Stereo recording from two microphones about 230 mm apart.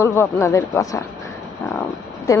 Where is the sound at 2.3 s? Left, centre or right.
Centre.